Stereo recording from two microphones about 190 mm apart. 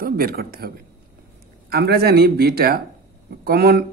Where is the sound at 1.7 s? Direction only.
55° right (ahead or behind).